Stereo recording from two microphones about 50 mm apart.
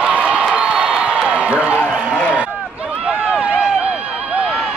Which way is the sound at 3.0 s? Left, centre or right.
Right.